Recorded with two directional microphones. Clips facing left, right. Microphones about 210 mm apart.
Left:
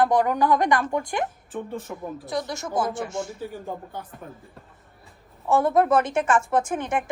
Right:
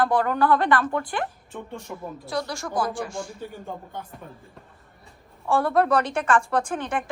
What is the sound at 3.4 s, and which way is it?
Speech, 5° left (ahead or behind).